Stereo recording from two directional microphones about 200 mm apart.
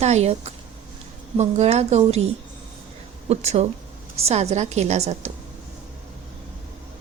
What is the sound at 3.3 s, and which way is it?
A woman's voice, 30° right (ahead or behind).